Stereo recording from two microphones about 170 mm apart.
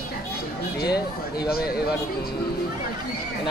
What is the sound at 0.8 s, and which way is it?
Speech, 25° left (ahead or behind).